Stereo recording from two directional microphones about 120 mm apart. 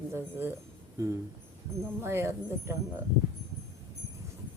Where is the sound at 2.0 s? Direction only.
20° right (ahead or behind).